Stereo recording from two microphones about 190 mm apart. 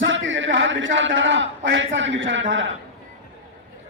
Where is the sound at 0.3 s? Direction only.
80° right.